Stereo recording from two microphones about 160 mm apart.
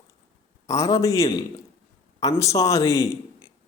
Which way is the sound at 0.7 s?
20° left (ahead or behind).